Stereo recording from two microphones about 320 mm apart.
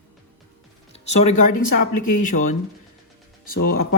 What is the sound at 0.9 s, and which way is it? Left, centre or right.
Music, centre.